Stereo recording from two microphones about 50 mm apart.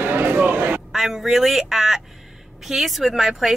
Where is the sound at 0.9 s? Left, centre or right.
Centre.